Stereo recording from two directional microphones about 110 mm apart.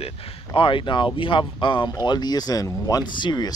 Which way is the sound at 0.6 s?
50° left (ahead or behind).